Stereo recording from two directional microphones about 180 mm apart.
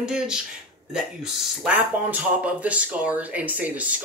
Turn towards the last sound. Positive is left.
turn(degrees=-10)  # may be behind; listen again after turning